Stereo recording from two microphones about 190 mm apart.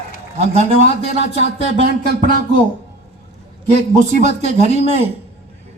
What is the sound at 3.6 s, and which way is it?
A man's voice, 35° right (ahead or behind).